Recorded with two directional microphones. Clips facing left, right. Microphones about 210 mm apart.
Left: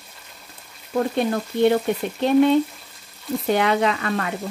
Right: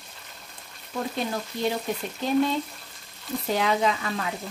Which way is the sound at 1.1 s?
60° left (ahead or behind).